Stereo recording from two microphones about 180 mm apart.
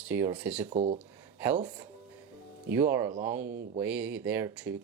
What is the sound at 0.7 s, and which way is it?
Speech, 35° right (ahead or behind).